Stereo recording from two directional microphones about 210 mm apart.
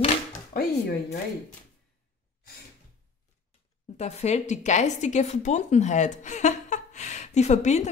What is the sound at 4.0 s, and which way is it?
Speech, 30° left (ahead or behind).